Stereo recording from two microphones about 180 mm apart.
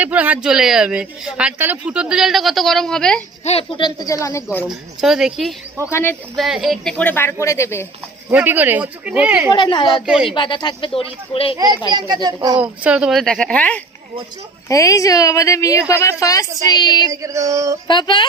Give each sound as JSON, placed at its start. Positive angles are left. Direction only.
{"t": 0.0, "sound": "a man's voice", "side_deg": -10}
{"t": 3.4, "sound": "a woman's voice", "side_deg": 35}
{"t": 4.6, "sound": "a man's voice", "side_deg": 0}
{"t": 5.9, "sound": "speech", "side_deg": 15}
{"t": 6.3, "sound": "a man's voice", "side_deg": 0}
{"t": 8.3, "sound": "speech", "side_deg": -10}
{"t": 9.5, "sound": "a woman's voice", "side_deg": 25}
{"t": 10.1, "sound": "a man's voice", "side_deg": -5}
{"t": 10.3, "sound": "a woman's voice", "side_deg": 25}
{"t": 11.9, "sound": "a child's voice", "side_deg": -25}
{"t": 12.5, "sound": "a man's voice", "side_deg": -5}
{"t": 14.7, "sound": "a woman's voice", "side_deg": 20}
{"t": 17.1, "sound": "speech", "side_deg": -20}
{"t": 17.8, "sound": "a woman's voice", "side_deg": 25}